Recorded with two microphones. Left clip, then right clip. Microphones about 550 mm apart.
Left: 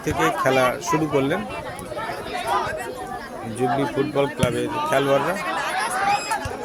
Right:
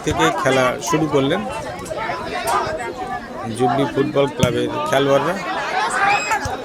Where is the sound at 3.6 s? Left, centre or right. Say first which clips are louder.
Right 4 dB; left.